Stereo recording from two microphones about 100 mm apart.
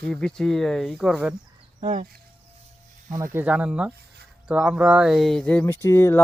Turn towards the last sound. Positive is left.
turn(degrees=25)  # may be behind; listen again after turning